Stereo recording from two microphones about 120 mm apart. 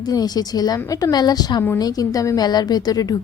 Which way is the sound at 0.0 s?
35° left (ahead or behind).